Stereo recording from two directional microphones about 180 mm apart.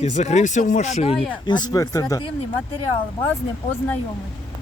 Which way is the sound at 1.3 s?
25° left (ahead or behind).